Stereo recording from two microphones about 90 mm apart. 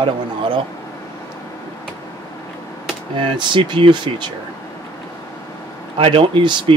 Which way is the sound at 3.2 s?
65° right (ahead or behind).